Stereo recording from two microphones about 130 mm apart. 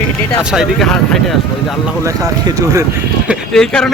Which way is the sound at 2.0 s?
25° right (ahead or behind).